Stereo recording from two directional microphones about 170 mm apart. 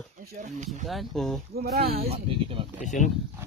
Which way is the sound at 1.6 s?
65° right (ahead or behind).